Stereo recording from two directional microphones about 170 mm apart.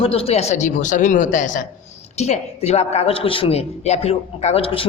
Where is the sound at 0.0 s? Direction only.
35° left (ahead or behind).